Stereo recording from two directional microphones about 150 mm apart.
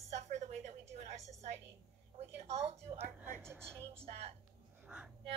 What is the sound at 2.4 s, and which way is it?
Speech, 45° right (ahead or behind).